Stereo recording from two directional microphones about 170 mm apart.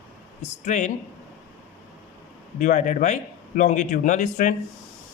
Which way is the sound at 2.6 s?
45° left (ahead or behind).